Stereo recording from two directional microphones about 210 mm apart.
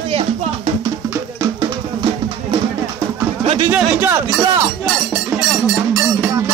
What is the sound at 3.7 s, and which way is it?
Music, 10° right (ahead or behind).